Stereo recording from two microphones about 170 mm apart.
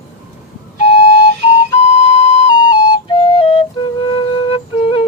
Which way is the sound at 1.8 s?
35° left (ahead or behind).